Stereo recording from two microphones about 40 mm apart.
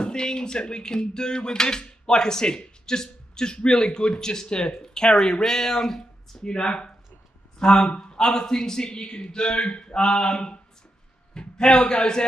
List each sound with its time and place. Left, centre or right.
0.0 s speech: centre
11.3 s a sound: left
11.8 s a man's voice: centre